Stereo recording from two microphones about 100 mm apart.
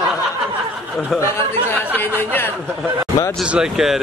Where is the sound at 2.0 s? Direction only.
20° left (ahead or behind).